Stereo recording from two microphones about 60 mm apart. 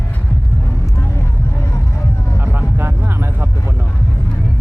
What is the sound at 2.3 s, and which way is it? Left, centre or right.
Vehicle, right.